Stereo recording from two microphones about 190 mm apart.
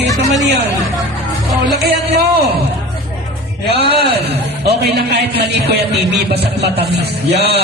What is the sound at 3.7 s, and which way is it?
A man's voice, 60° right (ahead or behind).